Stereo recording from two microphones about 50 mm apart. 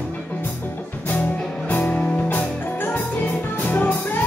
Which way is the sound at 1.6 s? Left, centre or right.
Left.